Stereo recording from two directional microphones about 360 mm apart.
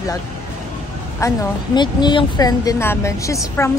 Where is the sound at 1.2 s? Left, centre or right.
Centre.